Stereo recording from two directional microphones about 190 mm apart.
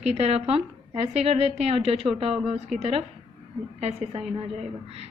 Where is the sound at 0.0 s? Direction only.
35° right (ahead or behind).